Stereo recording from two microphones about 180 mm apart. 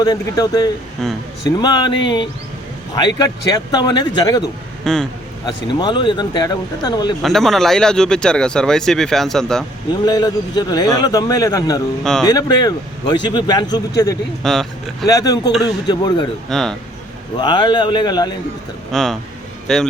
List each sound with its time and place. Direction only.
0.0 s a man's voice: 20° left (ahead or behind)
1.0 s speech: 5° left (ahead or behind)
1.5 s a man's voice: 25° left (ahead or behind)
4.9 s speech: 5° left (ahead or behind)
5.5 s a man's voice: 25° left (ahead or behind)
7.2 s speech: centre (ahead or behind)
9.9 s a man's voice: 20° left (ahead or behind)
14.4 s speech: centre (ahead or behind)
15.0 s a man's voice: 20° left (ahead or behind)
16.5 s speech: centre (ahead or behind)
17.3 s a man's voice: 25° left (ahead or behind)
18.9 s a man's voice: centre (ahead or behind)